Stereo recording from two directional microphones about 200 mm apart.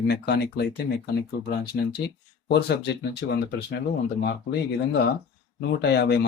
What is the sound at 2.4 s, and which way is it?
Speech, 55° left (ahead or behind).